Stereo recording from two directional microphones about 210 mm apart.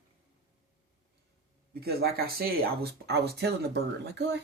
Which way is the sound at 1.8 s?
45° right (ahead or behind).